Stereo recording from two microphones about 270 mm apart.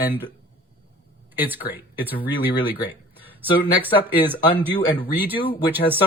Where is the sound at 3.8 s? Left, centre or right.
Centre.